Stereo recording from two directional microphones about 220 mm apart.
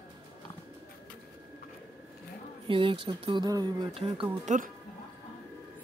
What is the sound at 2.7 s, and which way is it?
Speech, 25° right (ahead or behind).